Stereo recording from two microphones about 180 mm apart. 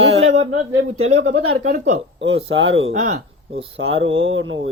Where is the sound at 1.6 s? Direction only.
40° right (ahead or behind).